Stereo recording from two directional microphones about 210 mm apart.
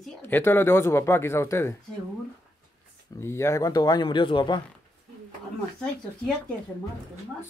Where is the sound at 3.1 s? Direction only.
10° left (ahead or behind).